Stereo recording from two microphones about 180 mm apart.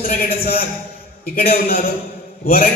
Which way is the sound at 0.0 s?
55° left (ahead or behind).